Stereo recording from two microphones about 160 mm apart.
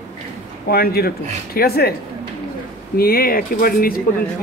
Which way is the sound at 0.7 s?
75° left (ahead or behind).